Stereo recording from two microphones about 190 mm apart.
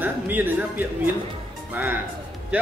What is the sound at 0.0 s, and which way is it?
Speech, 10° right (ahead or behind).